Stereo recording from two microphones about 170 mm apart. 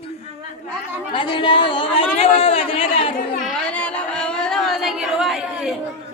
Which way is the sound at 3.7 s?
5° left (ahead or behind).